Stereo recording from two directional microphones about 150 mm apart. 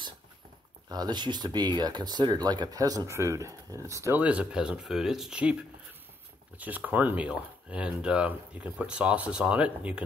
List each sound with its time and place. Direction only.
0.8 s speech: 25° right (ahead or behind); by 5.6 s 5° right (ahead or behind)
6.6 s speech: 10° right (ahead or behind)